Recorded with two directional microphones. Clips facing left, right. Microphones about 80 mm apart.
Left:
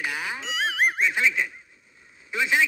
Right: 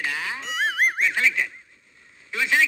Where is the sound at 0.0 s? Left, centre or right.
Centre.